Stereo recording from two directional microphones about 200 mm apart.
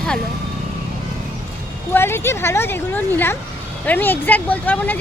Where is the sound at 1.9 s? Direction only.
10° left (ahead or behind).